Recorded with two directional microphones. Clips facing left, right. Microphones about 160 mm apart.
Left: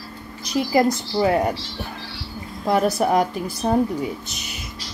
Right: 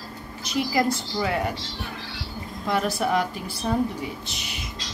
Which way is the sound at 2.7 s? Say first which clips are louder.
Left 5 dB; 40° left (ahead or behind).